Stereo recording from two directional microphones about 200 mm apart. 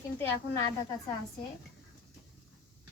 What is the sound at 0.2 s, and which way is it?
Speech, 15° left (ahead or behind).